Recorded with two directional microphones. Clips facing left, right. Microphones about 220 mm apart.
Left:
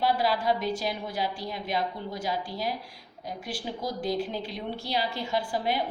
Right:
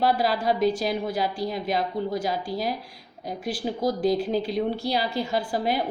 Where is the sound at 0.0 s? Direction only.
40° right (ahead or behind).